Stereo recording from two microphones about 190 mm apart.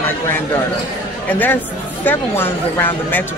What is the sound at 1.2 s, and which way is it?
Speech, 10° left (ahead or behind).